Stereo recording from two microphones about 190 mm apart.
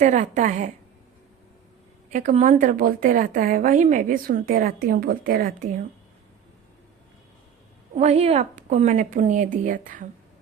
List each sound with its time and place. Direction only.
0.0 s a woman's voice: 40° right (ahead or behind)
2.0 s a woman's voice: 40° right (ahead or behind)
7.9 s a woman's voice: 35° right (ahead or behind)